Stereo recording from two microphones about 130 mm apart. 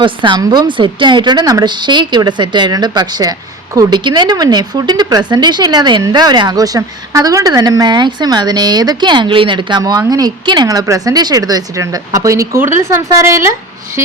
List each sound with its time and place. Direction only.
0.0 s a woman's voice: 35° right (ahead or behind); by 13.5 s 20° right (ahead or behind)